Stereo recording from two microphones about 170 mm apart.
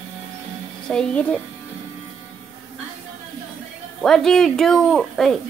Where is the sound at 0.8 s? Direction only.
5° left (ahead or behind).